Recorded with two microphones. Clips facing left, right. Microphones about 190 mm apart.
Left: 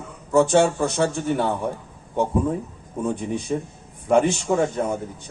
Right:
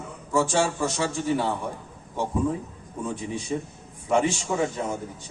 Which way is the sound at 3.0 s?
60° left (ahead or behind).